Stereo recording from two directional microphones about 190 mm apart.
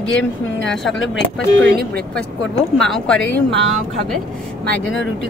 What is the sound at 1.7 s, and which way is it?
Speech, 55° right (ahead or behind).